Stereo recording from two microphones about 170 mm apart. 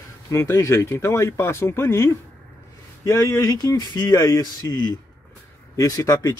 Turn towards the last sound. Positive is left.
turn(degrees=20)  # may be behind; listen again after turning